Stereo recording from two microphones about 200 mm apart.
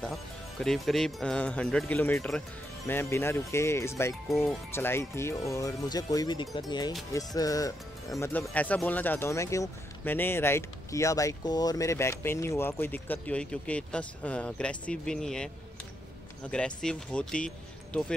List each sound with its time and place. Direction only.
0.1 s speech: centre (ahead or behind)